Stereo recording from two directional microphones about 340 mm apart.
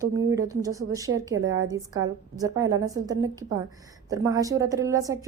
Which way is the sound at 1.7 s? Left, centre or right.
Centre.